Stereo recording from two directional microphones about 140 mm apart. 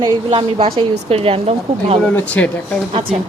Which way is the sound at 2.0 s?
10° left (ahead or behind).